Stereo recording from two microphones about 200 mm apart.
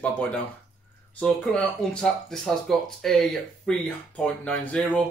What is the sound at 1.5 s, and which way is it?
Speech, centre (ahead or behind).